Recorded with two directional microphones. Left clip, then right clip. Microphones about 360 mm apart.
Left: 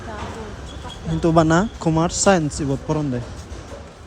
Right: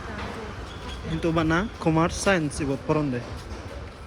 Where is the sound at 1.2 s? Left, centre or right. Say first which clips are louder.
Left 8 dB; centre.